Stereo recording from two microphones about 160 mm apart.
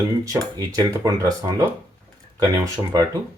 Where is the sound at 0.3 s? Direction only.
20° right (ahead or behind).